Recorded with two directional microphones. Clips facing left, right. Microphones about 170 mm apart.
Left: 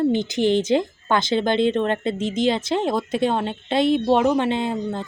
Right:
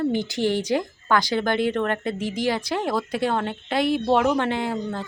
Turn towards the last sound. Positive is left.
turn(degrees=20)  # may be behind; listen again after turning